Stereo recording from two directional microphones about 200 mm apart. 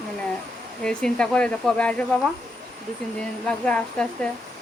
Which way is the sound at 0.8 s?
5° left (ahead or behind).